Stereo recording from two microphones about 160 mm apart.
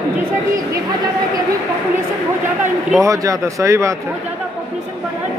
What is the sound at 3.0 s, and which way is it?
Speech, 20° right (ahead or behind).